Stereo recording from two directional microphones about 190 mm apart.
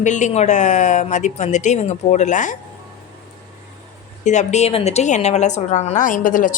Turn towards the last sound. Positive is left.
turn(degrees=45)  # may be behind; listen again after turning